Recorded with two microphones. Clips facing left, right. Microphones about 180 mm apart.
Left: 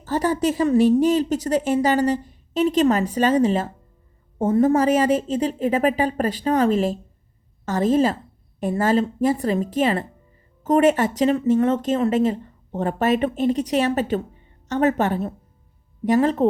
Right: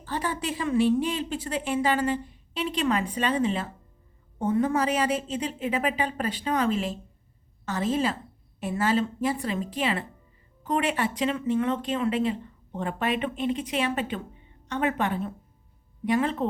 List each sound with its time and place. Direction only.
0.0 s a woman's voice: 40° left (ahead or behind)